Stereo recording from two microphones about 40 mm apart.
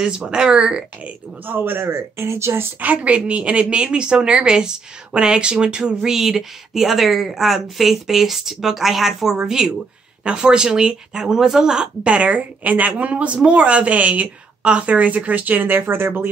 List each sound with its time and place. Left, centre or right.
0.3 s speech: right
1.4 s speech: right
2.8 s a woman's voice: right
6.0 s a woman's voice: centre
11.7 s a woman's voice: right